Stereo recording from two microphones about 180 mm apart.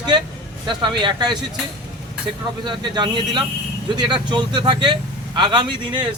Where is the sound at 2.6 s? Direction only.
25° right (ahead or behind).